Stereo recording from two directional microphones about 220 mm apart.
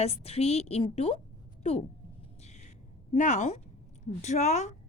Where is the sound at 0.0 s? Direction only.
30° left (ahead or behind).